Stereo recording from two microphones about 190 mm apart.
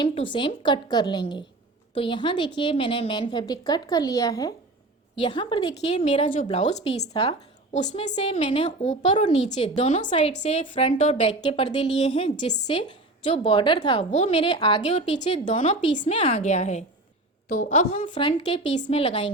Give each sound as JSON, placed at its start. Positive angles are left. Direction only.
{"t": 0.0, "sound": "a woman's voice", "side_deg": 25}
{"t": 18.1, "sound": "a woman's voice", "side_deg": 25}